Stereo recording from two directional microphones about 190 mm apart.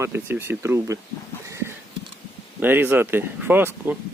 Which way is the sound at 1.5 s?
15° right (ahead or behind).